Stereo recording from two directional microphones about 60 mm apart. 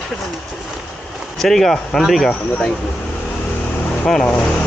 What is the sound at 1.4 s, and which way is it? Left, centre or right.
Speech, centre.